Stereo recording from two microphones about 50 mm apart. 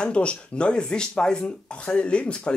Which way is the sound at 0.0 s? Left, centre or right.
Left.